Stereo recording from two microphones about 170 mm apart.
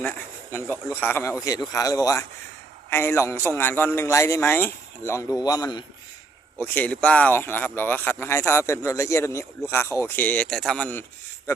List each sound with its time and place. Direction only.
0.5 s speech: 15° left (ahead or behind)
6.7 s speech: 10° left (ahead or behind)